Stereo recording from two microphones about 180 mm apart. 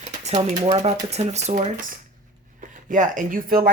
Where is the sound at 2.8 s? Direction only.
45° right (ahead or behind).